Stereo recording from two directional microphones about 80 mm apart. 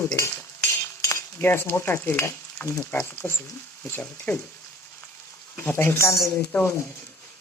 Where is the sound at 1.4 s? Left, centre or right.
Left.